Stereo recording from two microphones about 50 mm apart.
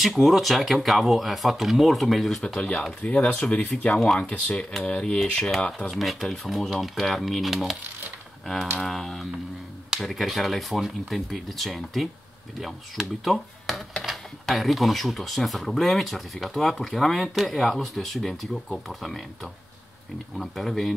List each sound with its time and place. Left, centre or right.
0.0 s speech: centre
2.4 s speech: left
3.9 s speech: centre
4.2 s speech: left
5.9 s speech: centre
8.8 s speech: centre
20.3 s speech: centre